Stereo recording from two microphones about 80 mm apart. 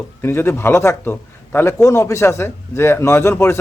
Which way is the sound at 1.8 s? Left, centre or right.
Left.